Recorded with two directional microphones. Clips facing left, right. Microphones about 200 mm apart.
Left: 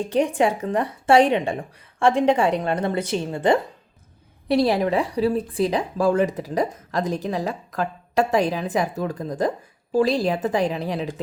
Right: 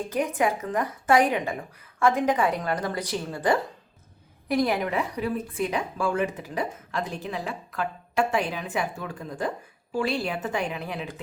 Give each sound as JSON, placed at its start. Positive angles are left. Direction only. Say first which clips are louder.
{"t": 0.1, "sound": "a woman's voice", "louder": "left 5 dB", "side_deg": 30}